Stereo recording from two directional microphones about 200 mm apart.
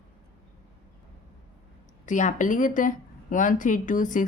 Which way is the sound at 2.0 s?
40° left (ahead or behind).